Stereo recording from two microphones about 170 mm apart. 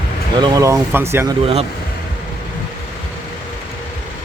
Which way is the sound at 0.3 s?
25° right (ahead or behind).